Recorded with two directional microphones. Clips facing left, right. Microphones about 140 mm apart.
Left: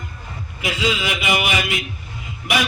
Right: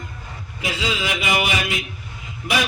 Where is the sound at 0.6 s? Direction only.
30° right (ahead or behind).